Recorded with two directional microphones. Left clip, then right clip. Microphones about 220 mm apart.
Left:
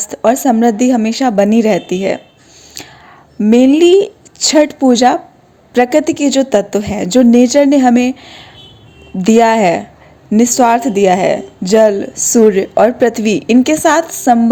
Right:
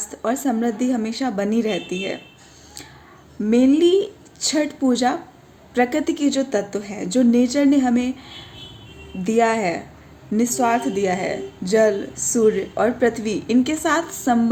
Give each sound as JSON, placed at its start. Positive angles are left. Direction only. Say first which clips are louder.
{"t": 0.0, "sound": "a woman's voice", "louder": "left 12 dB", "side_deg": 35}
{"t": 2.8, "sound": "whispering", "louder": "left 10 dB", "side_deg": 35}
{"t": 3.4, "sound": "a woman's voice", "louder": "left 8 dB", "side_deg": 35}